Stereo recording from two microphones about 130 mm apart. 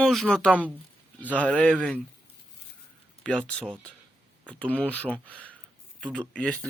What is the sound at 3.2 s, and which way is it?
Speech, 5° left (ahead or behind).